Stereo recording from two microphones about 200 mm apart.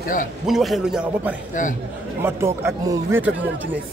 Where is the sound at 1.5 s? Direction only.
40° left (ahead or behind).